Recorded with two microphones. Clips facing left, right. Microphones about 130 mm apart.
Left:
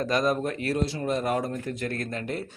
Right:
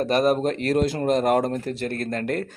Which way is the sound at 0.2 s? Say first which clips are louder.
Right 5 dB; 70° right (ahead or behind).